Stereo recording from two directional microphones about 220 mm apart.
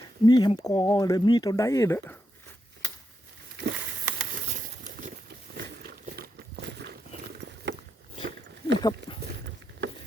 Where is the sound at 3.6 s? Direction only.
55° right (ahead or behind).